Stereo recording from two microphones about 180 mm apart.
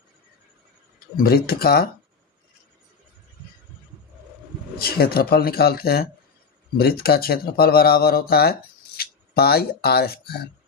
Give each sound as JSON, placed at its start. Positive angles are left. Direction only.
{"t": 1.1, "sound": "speech", "side_deg": 55}
{"t": 4.8, "sound": "speech", "side_deg": 55}